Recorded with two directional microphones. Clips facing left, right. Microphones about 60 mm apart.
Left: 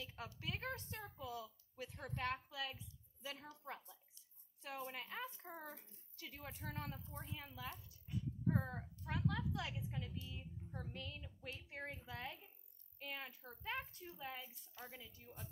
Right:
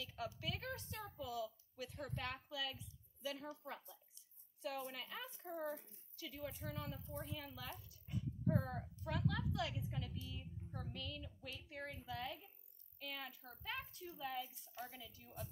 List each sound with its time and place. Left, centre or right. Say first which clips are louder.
0.0 s a woman's voice: right 3 dB; left
7.1 s a woman's voice: right 3 dB; left